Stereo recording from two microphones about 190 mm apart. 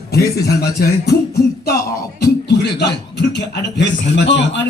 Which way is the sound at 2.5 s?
65° left (ahead or behind).